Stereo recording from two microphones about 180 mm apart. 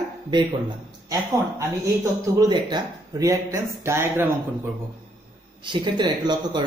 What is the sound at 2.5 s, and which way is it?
Speech, 20° right (ahead or behind).